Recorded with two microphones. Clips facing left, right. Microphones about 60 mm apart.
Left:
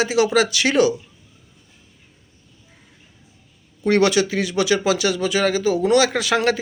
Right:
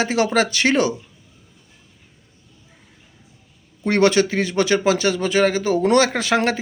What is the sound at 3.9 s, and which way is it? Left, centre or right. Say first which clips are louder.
Speech: even; right.